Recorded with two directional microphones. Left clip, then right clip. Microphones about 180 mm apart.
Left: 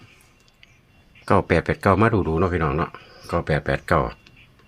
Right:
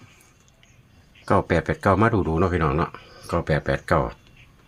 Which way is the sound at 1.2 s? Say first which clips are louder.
Left 2 dB; 10° left (ahead or behind).